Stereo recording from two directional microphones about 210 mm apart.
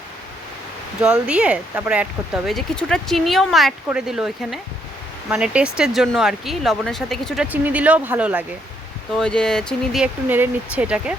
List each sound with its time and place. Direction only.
1.0 s speech: 5° right (ahead or behind)
9.1 s speech: 5° left (ahead or behind)